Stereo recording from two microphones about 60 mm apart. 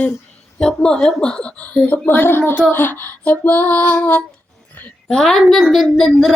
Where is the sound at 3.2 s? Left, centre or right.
Left.